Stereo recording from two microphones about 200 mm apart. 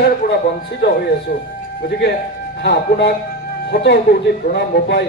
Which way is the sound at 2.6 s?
55° left (ahead or behind).